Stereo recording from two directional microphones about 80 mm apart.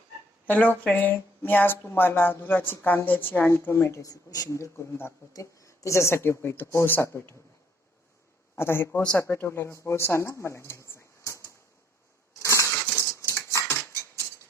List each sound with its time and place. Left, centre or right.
0.4 s speech: left
4.1 s speech: left
8.5 s speech: left
9.1 s speech: left
12.3 s cutlery: left
13.8 s a sound: left